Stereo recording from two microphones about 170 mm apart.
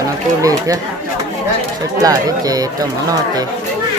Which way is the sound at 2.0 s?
20° right (ahead or behind).